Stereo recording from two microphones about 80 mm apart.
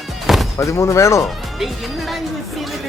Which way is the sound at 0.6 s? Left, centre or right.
Left.